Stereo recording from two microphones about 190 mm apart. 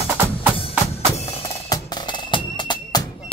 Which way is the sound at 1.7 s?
25° left (ahead or behind).